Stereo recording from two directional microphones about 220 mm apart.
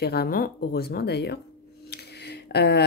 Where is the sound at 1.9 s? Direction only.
50° left (ahead or behind).